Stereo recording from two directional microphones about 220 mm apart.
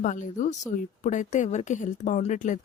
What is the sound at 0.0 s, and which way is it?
Speech, 35° left (ahead or behind).